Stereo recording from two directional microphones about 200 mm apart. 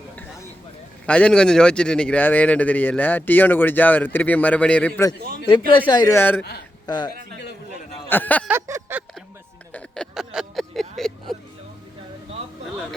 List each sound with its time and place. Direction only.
1.0 s speech: 5° left (ahead or behind)
5.7 s a man's voice: 20° left (ahead or behind)
7.3 s a sound: 55° left (ahead or behind)
8.1 s speech: 10° left (ahead or behind)
8.4 s a sound: 15° right (ahead or behind)
9.7 s vehicle: 5° left (ahead or behind)